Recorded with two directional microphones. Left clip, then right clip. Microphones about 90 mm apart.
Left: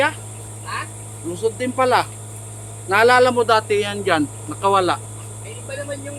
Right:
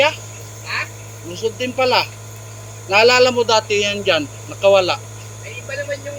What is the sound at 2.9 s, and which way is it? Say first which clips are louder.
Speech: right 1 dB; 90° left.